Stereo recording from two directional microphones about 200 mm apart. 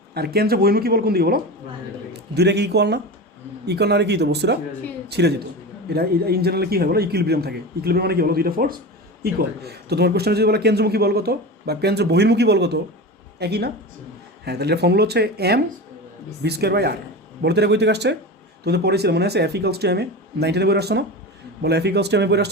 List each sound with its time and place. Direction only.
0.1 s a man's voice: 50° right (ahead or behind)